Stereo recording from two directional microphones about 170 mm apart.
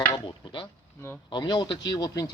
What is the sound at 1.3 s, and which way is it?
Speech, 25° left (ahead or behind).